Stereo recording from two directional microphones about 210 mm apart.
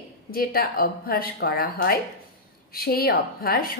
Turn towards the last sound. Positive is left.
turn(degrees=45)  # may be behind; listen again after turning